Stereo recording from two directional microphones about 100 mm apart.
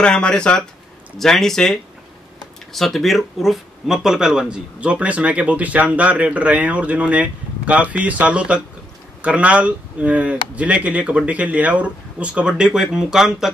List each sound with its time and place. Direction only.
0.0 s speech: 10° left (ahead or behind)